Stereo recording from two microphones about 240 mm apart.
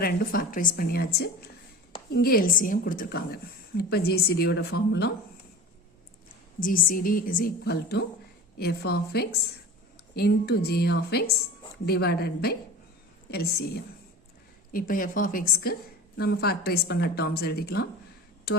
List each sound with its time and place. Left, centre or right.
0.0 s a woman's voice: left
6.6 s a woman's voice: left